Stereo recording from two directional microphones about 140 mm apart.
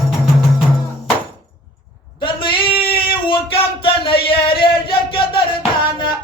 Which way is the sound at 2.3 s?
40° left (ahead or behind).